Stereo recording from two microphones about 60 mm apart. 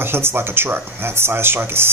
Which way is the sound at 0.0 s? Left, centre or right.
Right.